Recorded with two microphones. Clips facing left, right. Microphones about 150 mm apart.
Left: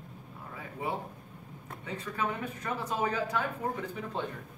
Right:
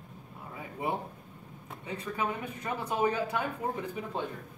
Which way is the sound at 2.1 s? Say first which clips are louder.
Left 1 dB; 10° right (ahead or behind).